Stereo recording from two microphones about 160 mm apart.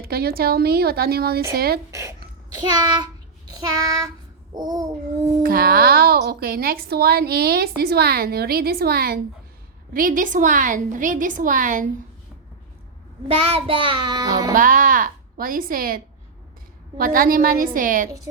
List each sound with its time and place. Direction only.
0.0 s a woman's voice: 75° right (ahead or behind)
2.8 s child singing: 25° right (ahead or behind)
4.5 s babbling: 25° right (ahead or behind)
5.4 s a woman's voice: 65° right (ahead or behind)
9.9 s a woman's voice: 60° right (ahead or behind)
13.2 s a child's voice: 40° right (ahead or behind)
14.5 s a woman's voice: 55° right (ahead or behind)
17.0 s a woman's voice: 65° right (ahead or behind)